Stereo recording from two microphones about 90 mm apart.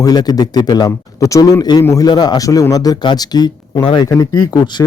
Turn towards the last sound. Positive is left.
turn(degrees=35)  # may be behind; listen again after turning